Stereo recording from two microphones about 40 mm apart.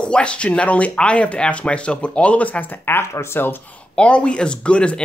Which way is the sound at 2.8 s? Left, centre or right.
Left.